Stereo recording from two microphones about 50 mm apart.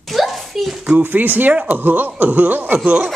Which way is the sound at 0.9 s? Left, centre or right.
Right.